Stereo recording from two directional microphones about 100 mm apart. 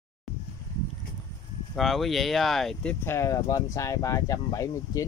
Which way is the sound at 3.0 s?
25° left (ahead or behind).